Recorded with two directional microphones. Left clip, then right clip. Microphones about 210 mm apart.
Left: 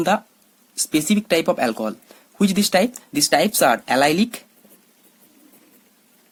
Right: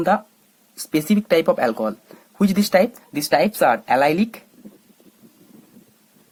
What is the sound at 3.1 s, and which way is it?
Speech, 35° left (ahead or behind).